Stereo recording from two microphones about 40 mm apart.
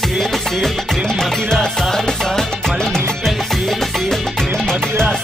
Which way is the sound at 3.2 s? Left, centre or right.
Centre.